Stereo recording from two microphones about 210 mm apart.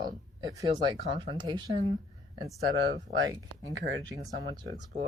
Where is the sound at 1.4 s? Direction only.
20° right (ahead or behind).